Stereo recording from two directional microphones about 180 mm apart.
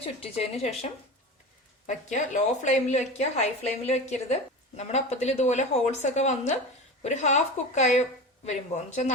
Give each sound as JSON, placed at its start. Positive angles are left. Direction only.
{"t": 0.0, "sound": "a woman's voice", "side_deg": 35}
{"t": 1.9, "sound": "a woman's voice", "side_deg": 45}